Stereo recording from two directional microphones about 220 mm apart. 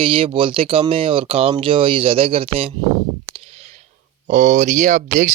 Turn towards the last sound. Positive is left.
turn(degrees=-35)  # may be behind; listen again after turning